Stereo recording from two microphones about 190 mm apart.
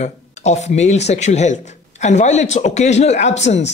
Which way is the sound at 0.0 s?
35° left (ahead or behind).